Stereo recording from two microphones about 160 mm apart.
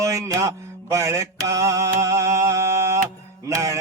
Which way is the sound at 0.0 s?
20° right (ahead or behind).